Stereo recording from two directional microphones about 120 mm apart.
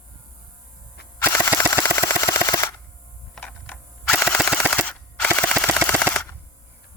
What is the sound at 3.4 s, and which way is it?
Cap gun, 15° left (ahead or behind).